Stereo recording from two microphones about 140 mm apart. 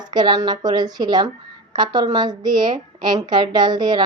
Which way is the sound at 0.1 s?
30° right (ahead or behind).